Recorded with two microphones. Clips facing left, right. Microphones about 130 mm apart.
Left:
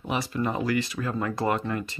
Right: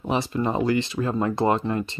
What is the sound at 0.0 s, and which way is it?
Speech, 30° right (ahead or behind).